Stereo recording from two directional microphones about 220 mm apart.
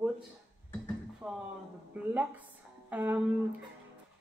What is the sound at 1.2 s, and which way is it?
Speech, 5° right (ahead or behind).